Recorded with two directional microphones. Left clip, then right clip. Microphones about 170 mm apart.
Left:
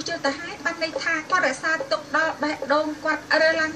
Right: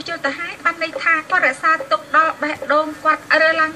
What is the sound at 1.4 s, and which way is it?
A man's voice, 45° right (ahead or behind).